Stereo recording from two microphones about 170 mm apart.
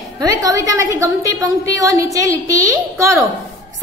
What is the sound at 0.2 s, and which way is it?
A woman's voice, 20° right (ahead or behind).